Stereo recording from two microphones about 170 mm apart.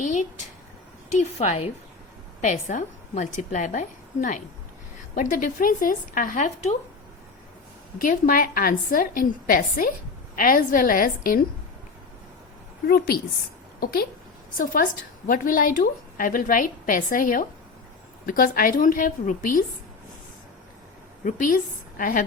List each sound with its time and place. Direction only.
0.0 s a sound: 45° left (ahead or behind)
1.2 s a woman's voice: 40° left (ahead or behind)
2.4 s a woman's voice: 50° left (ahead or behind)
8.0 s a woman's voice: 55° left (ahead or behind)
12.9 s a woman's voice: 65° left (ahead or behind)
21.2 s a woman's voice: 50° left (ahead or behind)